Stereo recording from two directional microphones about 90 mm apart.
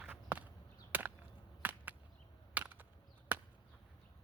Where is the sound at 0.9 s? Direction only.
20° right (ahead or behind).